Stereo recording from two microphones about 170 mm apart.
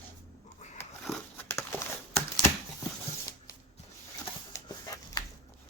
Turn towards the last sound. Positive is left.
turn(degrees=20)  # may be behind; listen again after turning